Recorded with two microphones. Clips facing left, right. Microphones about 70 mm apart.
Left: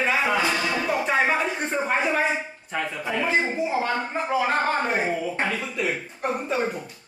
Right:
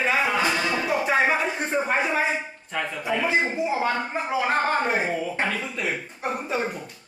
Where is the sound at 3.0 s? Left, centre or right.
Centre.